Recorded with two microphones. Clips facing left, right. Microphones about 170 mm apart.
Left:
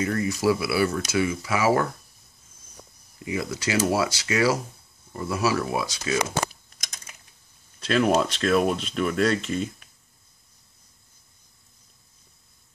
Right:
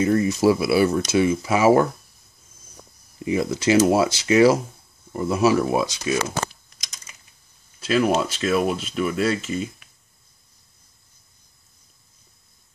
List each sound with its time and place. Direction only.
0.0 s speech: 25° right (ahead or behind)
3.3 s speech: 25° right (ahead or behind)
6.5 s typing: 55° left (ahead or behind)
7.8 s speech: 5° right (ahead or behind)